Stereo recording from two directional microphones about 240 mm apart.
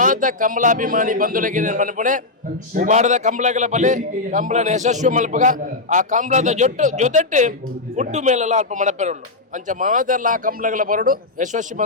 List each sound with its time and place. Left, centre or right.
0.0 s a man's voice: right